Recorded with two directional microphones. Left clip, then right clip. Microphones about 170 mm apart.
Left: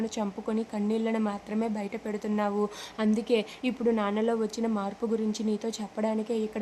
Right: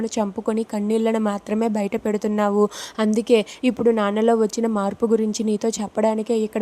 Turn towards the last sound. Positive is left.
turn(degrees=-35)  # may be behind; listen again after turning